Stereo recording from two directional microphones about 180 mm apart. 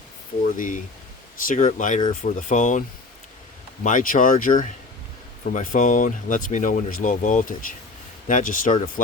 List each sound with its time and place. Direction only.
0.5 s speech: 45° left (ahead or behind)
3.8 s speech: 45° left (ahead or behind)